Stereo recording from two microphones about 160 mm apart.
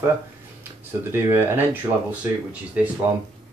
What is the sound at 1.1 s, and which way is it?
Speech, 15° right (ahead or behind).